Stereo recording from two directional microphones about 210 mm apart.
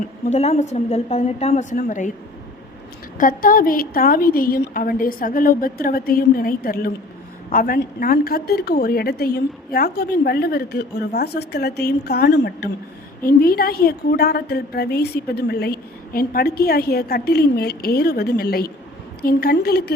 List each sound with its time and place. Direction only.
0.3 s a woman's voice: 35° left (ahead or behind)
3.2 s a woman's voice: 40° left (ahead or behind)